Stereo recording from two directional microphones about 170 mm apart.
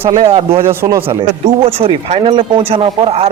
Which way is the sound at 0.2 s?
30° right (ahead or behind).